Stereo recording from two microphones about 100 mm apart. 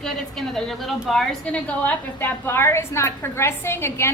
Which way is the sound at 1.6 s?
15° left (ahead or behind).